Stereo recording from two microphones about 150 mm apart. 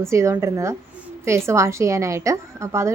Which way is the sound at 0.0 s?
20° right (ahead or behind).